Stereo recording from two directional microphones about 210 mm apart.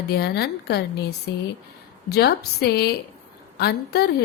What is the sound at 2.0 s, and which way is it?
Speech, 50° left (ahead or behind).